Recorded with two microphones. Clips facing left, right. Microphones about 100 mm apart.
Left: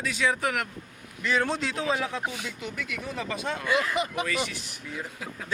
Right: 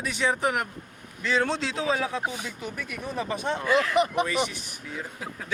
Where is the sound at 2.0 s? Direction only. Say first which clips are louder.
Right 2 dB; 15° right (ahead or behind).